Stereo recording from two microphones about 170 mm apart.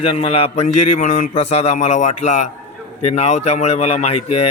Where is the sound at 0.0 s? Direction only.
35° left (ahead or behind).